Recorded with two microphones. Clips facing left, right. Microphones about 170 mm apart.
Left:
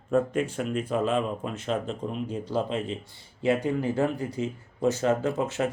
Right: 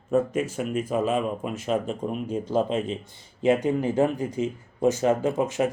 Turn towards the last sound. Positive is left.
turn(degrees=-15)  # may be behind; listen again after turning